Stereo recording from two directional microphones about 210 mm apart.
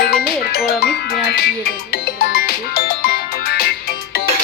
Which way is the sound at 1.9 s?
45° left (ahead or behind).